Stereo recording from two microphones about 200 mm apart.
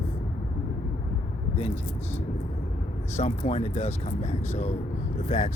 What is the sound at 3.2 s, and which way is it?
Speech, 35° left (ahead or behind).